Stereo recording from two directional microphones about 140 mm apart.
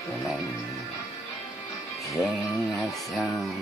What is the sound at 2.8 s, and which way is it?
Speech, centre (ahead or behind).